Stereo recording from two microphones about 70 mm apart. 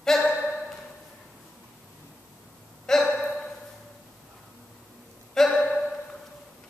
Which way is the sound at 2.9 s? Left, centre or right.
Centre.